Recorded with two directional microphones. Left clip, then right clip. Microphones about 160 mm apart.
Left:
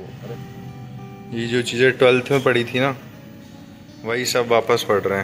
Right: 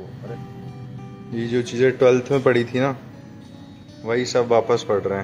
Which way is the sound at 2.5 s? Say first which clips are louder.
Left 1 dB; 10° right (ahead or behind).